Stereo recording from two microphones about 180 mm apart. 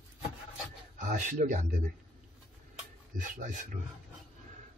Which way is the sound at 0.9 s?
45° right (ahead or behind).